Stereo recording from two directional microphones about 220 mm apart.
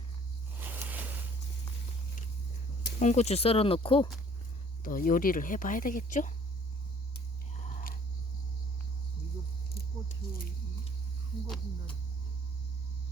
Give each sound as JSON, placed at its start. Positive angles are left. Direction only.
{"t": 0.6, "sound": "a sound", "side_deg": -10}
{"t": 3.0, "sound": "speech", "side_deg": 30}
{"t": 4.8, "sound": "speech", "side_deg": 40}
{"t": 7.5, "sound": "biting", "side_deg": 35}
{"t": 9.7, "sound": "squish", "side_deg": 45}